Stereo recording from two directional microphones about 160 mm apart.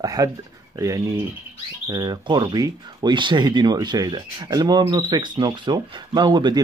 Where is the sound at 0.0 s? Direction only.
20° right (ahead or behind).